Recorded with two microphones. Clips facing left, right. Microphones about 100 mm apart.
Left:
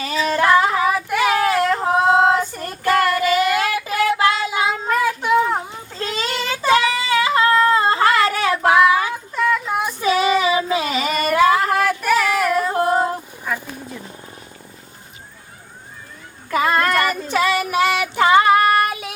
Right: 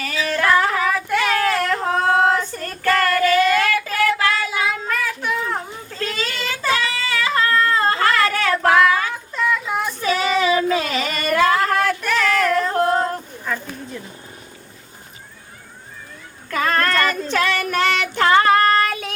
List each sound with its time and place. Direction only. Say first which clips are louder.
0.0 s child singing: left 3 dB; 20° left (ahead or behind)
16.5 s child singing: left 2 dB; 10° left (ahead or behind)